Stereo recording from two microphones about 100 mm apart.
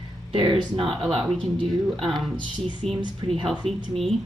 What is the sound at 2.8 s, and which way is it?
Speech, 90° right.